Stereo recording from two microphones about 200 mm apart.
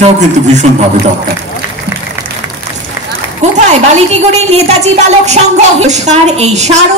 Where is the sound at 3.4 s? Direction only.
35° right (ahead or behind).